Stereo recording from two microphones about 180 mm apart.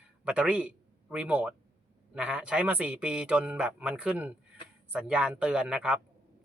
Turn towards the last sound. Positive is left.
turn(degrees=-5)  # may be behind; listen again after turning